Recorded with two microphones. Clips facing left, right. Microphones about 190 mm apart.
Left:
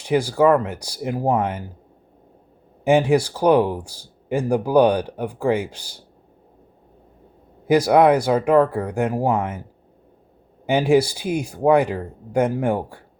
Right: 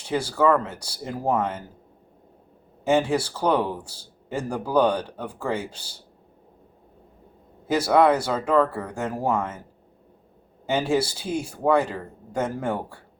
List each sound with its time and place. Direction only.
0.0 s speech: 15° left (ahead or behind)
2.8 s speech: 15° left (ahead or behind)
7.7 s speech: 15° left (ahead or behind)
10.7 s speech: 15° left (ahead or behind)